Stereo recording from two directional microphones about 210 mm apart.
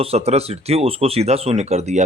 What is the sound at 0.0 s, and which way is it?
Speech, 30° right (ahead or behind).